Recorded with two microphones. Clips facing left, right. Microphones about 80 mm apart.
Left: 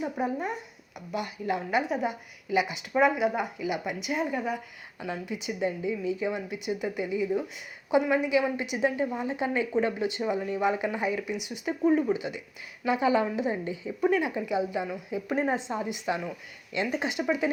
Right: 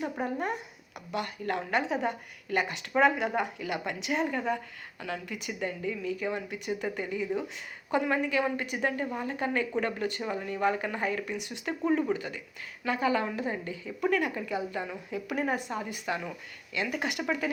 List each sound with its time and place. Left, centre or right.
0.0 s a woman's voice: centre